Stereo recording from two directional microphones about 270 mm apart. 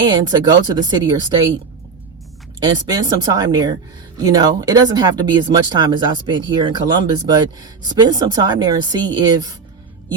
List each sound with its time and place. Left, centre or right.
0.0 s speech: centre
2.6 s speech: centre